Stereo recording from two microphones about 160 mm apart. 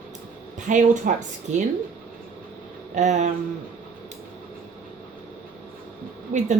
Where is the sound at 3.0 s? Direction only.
50° right (ahead or behind).